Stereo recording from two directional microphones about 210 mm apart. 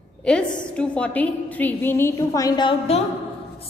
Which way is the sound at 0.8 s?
5° left (ahead or behind).